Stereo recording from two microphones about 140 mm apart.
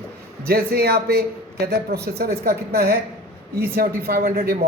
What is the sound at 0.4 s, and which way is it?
A man's voice, 90° right.